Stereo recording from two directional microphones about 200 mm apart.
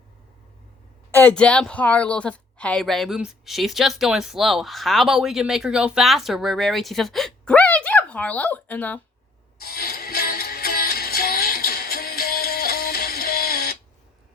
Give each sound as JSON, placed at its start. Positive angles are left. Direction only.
{"t": 1.1, "sound": "a woman's voice", "side_deg": 5}
{"t": 9.6, "sound": "music", "side_deg": 50}